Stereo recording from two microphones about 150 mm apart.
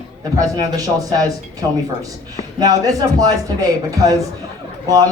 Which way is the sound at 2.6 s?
25° right (ahead or behind).